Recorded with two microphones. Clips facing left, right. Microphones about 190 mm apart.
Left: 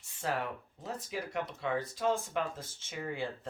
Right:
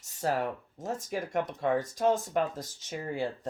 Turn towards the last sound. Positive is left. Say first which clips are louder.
# right 4 dB
turn(degrees=-40)  # may be behind; listen again after turning